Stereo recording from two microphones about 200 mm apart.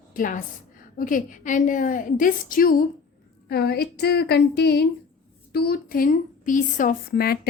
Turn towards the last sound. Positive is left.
turn(degrees=50)  # may be behind; listen again after turning